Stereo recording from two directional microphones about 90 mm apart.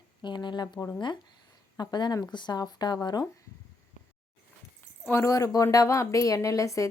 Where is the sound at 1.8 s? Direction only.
50° left (ahead or behind).